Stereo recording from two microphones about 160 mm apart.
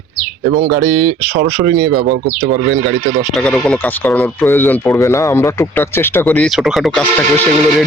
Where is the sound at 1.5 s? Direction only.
15° right (ahead or behind).